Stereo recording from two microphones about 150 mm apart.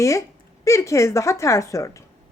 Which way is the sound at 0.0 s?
20° left (ahead or behind).